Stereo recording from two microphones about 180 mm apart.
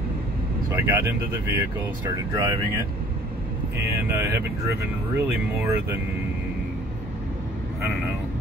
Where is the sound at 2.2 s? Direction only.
15° right (ahead or behind).